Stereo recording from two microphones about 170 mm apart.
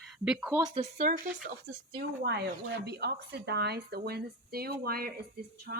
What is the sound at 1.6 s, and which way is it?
Speech, 85° right.